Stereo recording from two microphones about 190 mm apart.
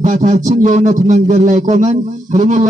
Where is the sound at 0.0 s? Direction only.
40° right (ahead or behind).